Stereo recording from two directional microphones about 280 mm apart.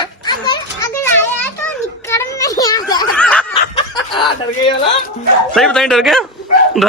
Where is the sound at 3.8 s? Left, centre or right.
Centre.